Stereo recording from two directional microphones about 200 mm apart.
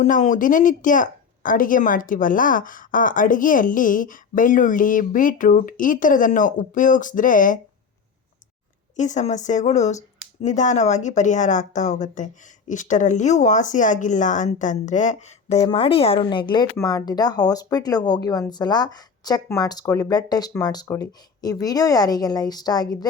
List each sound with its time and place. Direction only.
0.0 s speech: 40° left (ahead or behind)
9.0 s a woman's voice: 35° left (ahead or behind); by 23.0 s 20° left (ahead or behind)